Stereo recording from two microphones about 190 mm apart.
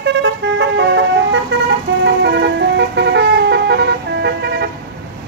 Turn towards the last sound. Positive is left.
turn(degrees=-60)  # may be behind; listen again after turning